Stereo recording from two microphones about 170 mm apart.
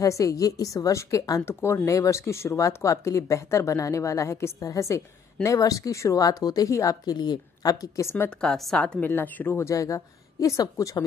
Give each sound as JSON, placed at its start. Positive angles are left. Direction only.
{"t": 0.0, "sound": "a woman's voice", "side_deg": 20}
{"t": 8.4, "sound": "speech", "side_deg": 5}